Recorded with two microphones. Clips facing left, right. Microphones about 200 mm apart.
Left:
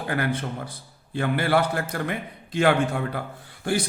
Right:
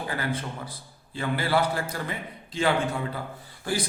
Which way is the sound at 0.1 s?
55° left (ahead or behind).